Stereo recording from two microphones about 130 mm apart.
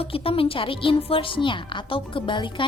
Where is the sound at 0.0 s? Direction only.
45° left (ahead or behind).